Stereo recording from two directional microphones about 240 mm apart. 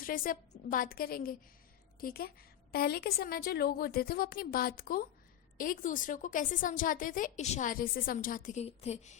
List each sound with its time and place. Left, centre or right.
0.0 s a woman's voice: left